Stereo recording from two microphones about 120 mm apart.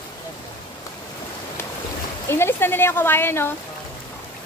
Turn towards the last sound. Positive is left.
turn(degrees=20)  # may be behind; listen again after turning